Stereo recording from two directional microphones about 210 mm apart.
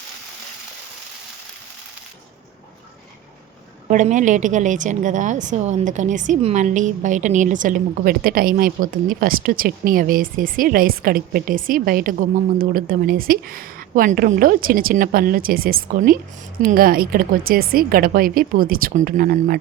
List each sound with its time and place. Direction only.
3.8 s a woman's voice: 35° right (ahead or behind)